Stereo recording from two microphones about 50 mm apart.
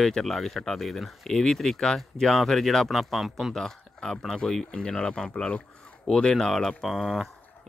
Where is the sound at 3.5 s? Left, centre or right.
Centre.